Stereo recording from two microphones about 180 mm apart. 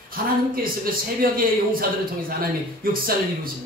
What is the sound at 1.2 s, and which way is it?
A man's voice, 50° right (ahead or behind).